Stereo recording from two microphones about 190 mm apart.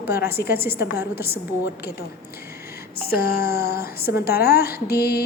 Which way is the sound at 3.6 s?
55° left (ahead or behind).